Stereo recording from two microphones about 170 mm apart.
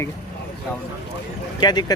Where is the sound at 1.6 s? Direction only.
25° left (ahead or behind).